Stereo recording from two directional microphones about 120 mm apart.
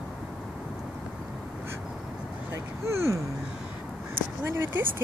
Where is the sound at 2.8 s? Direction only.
25° right (ahead or behind).